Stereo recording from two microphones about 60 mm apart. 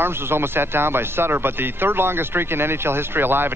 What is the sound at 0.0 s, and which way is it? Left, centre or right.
Speech, right.